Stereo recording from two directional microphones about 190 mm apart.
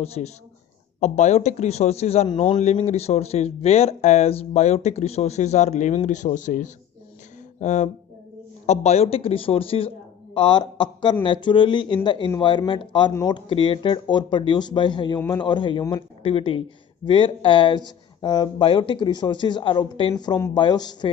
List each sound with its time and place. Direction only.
0.0 s speech: 35° left (ahead or behind)